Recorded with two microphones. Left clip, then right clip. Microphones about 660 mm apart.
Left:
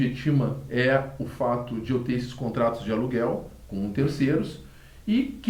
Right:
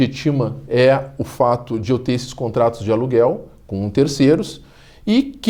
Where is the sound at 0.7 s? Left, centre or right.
Right.